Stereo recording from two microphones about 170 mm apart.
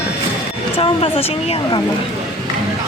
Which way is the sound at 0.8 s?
30° left (ahead or behind).